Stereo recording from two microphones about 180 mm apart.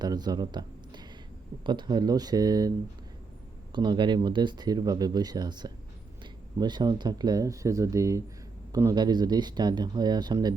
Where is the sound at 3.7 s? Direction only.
25° right (ahead or behind).